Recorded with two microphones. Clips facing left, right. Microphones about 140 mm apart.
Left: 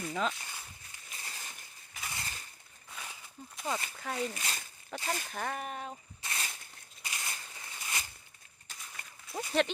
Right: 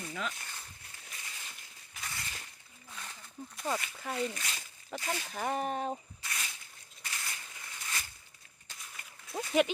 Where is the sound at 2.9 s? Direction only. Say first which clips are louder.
Right 1 dB; 10° left (ahead or behind).